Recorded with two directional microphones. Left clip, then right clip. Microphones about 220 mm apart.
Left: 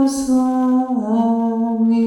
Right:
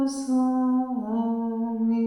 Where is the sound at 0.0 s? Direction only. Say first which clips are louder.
Left 8 dB; 30° left (ahead or behind).